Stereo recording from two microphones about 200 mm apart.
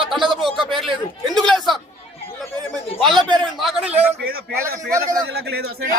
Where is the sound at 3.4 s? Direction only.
Centre (ahead or behind).